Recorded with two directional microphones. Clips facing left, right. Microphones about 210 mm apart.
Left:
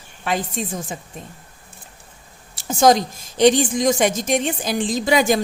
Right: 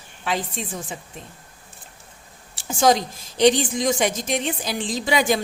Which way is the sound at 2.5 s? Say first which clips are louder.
Left 3 dB; 40° left (ahead or behind).